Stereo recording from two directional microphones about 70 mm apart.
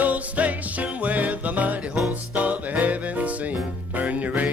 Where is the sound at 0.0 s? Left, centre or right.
Right.